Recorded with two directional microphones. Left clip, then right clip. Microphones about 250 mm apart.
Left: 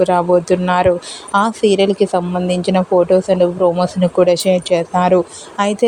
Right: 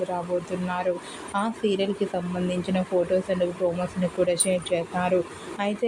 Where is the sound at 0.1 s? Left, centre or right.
Left.